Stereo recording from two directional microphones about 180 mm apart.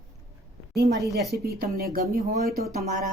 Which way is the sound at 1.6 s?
55° right (ahead or behind).